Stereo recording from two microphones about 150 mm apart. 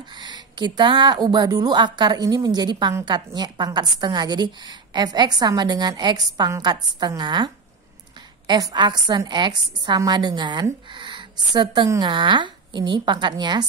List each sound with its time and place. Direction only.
0.1 s a woman's voice: 30° right (ahead or behind)